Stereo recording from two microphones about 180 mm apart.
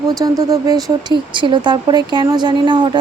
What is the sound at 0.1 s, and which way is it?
A woman's voice, 20° right (ahead or behind).